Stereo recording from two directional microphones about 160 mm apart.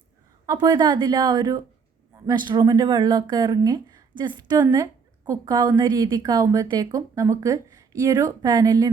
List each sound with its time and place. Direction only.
0.4 s a woman's voice: 25° right (ahead or behind)